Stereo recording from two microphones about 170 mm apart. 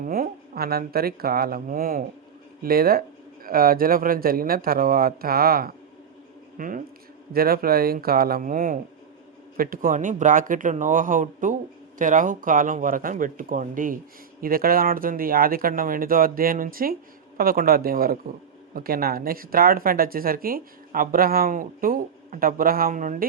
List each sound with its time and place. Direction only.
0.0 s speech: 60° right (ahead or behind)